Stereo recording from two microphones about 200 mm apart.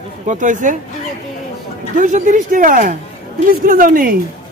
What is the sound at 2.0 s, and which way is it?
A woman's voice, 40° right (ahead or behind).